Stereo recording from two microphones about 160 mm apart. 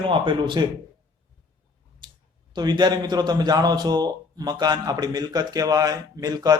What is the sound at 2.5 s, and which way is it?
A man's voice, 25° right (ahead or behind).